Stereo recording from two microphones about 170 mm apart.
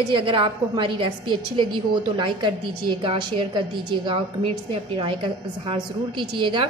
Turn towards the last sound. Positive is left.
turn(degrees=-30)  # may be behind; listen again after turning